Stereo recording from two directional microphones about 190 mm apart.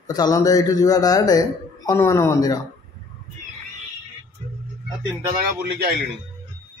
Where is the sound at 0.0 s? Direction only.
20° left (ahead or behind).